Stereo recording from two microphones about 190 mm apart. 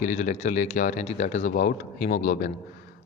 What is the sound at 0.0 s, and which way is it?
Speech, 35° left (ahead or behind).